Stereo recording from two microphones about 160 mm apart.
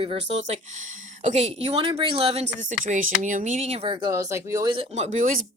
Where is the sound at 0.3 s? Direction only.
35° right (ahead or behind).